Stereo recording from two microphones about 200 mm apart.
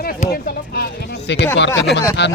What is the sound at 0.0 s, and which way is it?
Speech, 45° left (ahead or behind).